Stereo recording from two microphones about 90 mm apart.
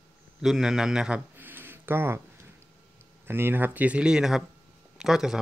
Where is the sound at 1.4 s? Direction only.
20° right (ahead or behind).